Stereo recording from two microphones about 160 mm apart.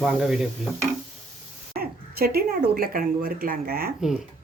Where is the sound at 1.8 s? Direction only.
75° right (ahead or behind).